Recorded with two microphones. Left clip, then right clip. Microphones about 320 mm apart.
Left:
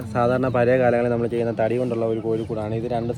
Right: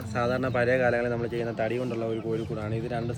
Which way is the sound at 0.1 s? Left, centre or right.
Centre.